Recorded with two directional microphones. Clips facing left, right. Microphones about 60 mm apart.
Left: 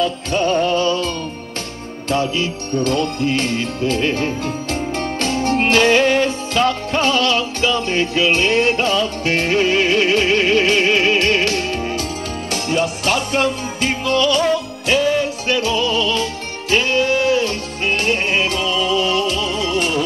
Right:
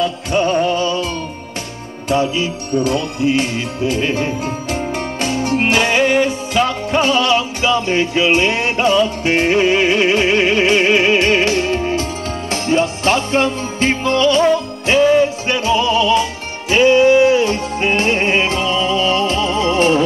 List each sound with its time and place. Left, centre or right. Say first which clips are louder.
0.0 s music: right 2 dB; centre